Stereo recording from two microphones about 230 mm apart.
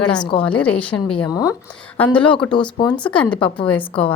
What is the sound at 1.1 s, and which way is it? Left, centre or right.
A woman's voice, left.